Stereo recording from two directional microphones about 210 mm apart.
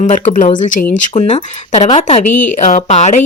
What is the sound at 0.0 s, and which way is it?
Speech, 35° left (ahead or behind).